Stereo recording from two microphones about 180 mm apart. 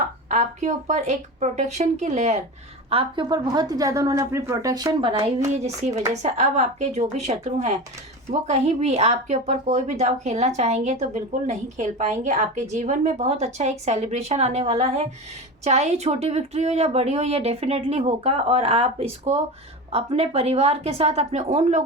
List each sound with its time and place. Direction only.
0.3 s a woman's voice: 40° right (ahead or behind)
2.9 s a woman's voice: 30° right (ahead or behind)